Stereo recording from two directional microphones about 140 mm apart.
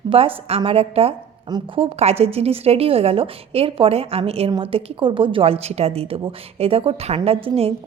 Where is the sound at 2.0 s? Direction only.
50° right (ahead or behind).